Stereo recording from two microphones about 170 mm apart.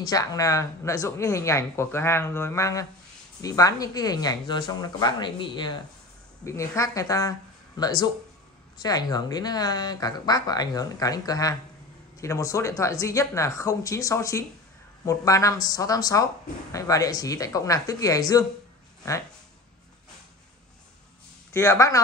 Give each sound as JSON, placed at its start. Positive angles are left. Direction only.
{"t": 0.1, "sound": "speech", "side_deg": 20}
{"t": 21.5, "sound": "speech", "side_deg": 15}